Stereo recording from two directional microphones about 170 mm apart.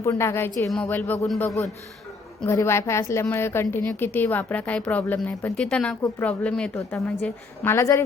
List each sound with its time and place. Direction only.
0.0 s a woman's voice: 15° left (ahead or behind)